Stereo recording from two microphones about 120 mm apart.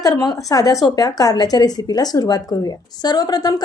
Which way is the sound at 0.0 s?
35° left (ahead or behind).